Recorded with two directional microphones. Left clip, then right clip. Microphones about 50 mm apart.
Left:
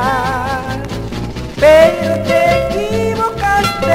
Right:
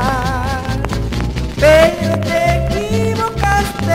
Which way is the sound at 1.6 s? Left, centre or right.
Left.